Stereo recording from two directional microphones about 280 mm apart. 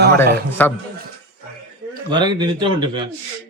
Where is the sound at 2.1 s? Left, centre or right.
Centre.